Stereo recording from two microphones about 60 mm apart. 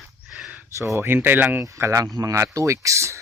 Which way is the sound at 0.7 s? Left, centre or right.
Right.